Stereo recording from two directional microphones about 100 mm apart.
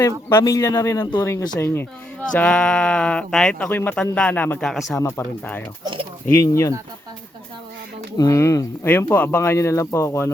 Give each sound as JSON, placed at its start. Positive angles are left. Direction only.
{"t": 0.4, "sound": "speech", "side_deg": 35}
{"t": 2.3, "sound": "speech", "side_deg": 10}
{"t": 4.6, "sound": "speech", "side_deg": 0}
{"t": 5.0, "sound": "speech", "side_deg": 20}
{"t": 5.8, "sound": "speech", "side_deg": -55}
{"t": 6.2, "sound": "speech", "side_deg": 30}
{"t": 8.2, "sound": "speech", "side_deg": 30}